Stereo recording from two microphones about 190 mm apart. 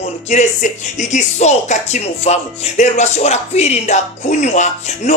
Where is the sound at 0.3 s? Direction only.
40° left (ahead or behind).